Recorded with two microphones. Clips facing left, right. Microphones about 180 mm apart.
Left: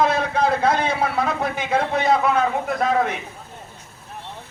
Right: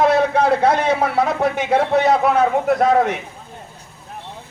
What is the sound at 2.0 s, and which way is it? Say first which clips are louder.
Speech: right 2 dB; 70° right (ahead or behind).